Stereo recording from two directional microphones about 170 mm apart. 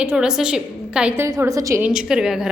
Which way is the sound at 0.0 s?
5° right (ahead or behind).